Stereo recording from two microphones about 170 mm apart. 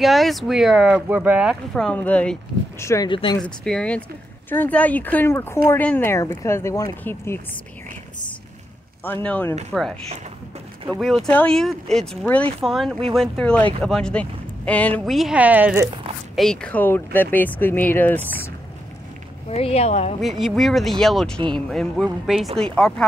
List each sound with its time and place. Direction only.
0.0 s speech: centre (ahead or behind); by 3.1 s 15° left (ahead or behind)
3.1 s speech: 30° left (ahead or behind)
3.3 s speech: 5° left (ahead or behind)
9.0 s speech: 10° left (ahead or behind)
11.2 s speech: 10° left (ahead or behind)
15.1 s a woman's voice: 5° right (ahead or behind)
16.3 s speech: 5° left (ahead or behind)
19.5 s speech: 40° left (ahead or behind)
20.2 s speech: centre (ahead or behind)